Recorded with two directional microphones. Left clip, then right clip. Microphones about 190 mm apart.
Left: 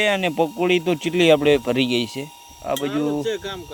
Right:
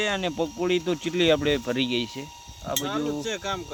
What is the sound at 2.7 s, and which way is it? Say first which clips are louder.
Speech: left 5 dB; 30° left (ahead or behind).